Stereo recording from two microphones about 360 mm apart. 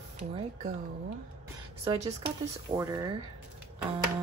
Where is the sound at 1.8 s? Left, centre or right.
Centre.